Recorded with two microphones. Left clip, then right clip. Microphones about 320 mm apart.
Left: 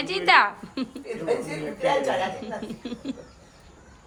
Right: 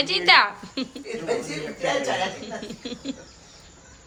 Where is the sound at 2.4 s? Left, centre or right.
Centre.